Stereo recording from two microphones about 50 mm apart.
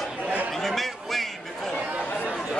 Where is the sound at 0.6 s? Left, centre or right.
Centre.